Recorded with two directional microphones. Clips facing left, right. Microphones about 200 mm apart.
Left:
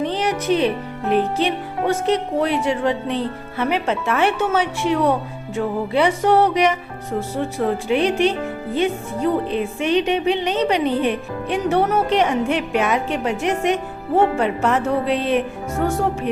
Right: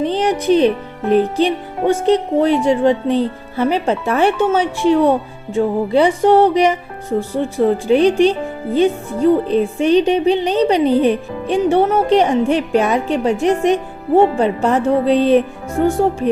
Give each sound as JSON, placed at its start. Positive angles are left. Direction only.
{"t": 0.0, "sound": "speech", "side_deg": -35}